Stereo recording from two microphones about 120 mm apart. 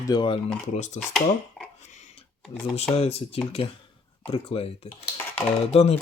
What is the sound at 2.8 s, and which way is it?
Speech, 60° left (ahead or behind).